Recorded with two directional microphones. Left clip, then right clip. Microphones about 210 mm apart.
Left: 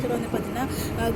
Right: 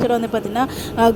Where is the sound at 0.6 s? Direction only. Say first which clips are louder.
Right 11 dB; 55° right (ahead or behind).